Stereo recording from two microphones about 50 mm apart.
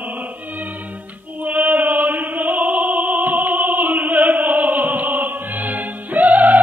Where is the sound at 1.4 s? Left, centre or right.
Right.